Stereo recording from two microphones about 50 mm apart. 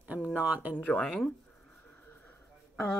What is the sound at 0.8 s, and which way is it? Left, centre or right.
Speech, left.